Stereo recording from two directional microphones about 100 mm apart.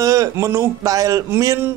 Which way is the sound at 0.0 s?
35° right (ahead or behind).